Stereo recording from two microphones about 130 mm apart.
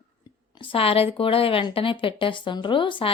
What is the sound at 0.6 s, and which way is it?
A woman's voice, 45° left (ahead or behind).